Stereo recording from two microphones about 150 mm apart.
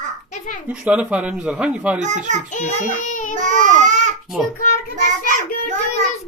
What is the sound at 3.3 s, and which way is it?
Speech, 55° right (ahead or behind).